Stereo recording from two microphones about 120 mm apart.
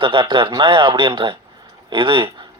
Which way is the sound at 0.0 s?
40° right (ahead or behind).